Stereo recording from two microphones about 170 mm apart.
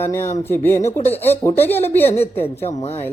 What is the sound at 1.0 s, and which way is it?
Speech, 10° left (ahead or behind).